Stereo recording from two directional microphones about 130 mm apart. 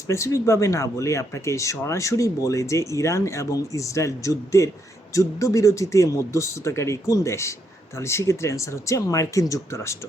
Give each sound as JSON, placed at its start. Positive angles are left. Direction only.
{"t": 0.1, "sound": "speech", "side_deg": 25}